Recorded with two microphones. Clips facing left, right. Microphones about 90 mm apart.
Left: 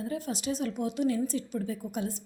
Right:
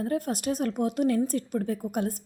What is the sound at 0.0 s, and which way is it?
A woman's voice, 50° right (ahead or behind).